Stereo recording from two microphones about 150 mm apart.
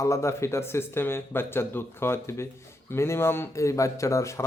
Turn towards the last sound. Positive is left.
turn(degrees=20)  # may be behind; listen again after turning